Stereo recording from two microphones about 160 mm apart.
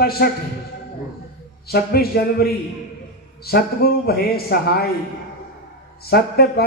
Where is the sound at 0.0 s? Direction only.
75° left (ahead or behind).